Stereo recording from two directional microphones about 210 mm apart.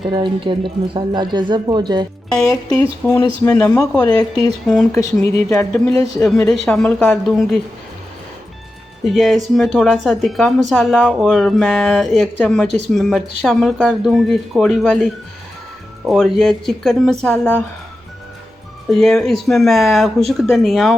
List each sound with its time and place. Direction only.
0.1 s speech: 25° right (ahead or behind)
3.0 s speech: 10° left (ahead or behind)
5.1 s speech: 5° left (ahead or behind)
9.0 s speech: centre (ahead or behind)
18.9 s speech: centre (ahead or behind)